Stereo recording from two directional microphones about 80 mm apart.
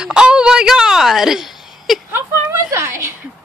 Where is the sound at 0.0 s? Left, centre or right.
Centre.